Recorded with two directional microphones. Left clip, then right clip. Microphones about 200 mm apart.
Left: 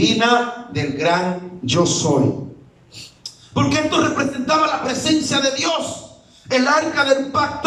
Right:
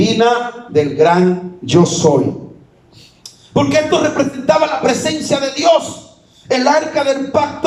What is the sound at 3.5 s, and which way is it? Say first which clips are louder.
Speech: right 5 dB; 35° right (ahead or behind).